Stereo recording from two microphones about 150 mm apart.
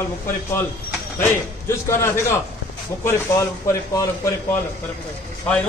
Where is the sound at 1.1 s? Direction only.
15° left (ahead or behind).